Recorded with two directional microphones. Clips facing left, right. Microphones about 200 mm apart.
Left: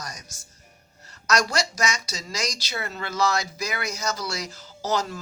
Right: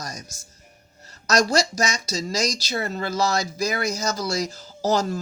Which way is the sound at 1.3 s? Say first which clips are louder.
Right 4 dB; 40° right (ahead or behind).